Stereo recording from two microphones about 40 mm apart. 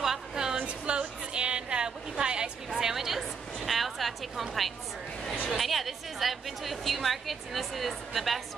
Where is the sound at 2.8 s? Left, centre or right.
Centre.